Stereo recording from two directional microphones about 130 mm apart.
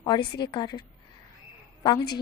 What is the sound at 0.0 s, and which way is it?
A woman's voice, 35° left (ahead or behind).